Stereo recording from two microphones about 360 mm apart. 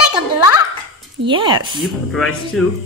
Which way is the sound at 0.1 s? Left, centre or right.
Centre.